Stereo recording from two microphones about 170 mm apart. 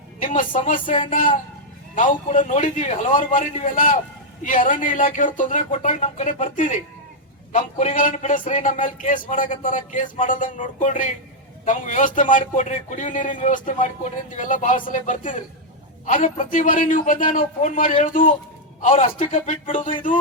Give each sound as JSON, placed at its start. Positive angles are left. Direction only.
{"t": 0.2, "sound": "a man's voice", "side_deg": 50}
{"t": 0.9, "sound": "a sound", "side_deg": 30}
{"t": 2.0, "sound": "a man's voice", "side_deg": 50}